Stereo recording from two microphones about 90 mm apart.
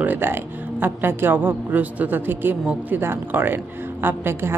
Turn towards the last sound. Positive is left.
turn(degrees=-25)  # may be behind; listen again after turning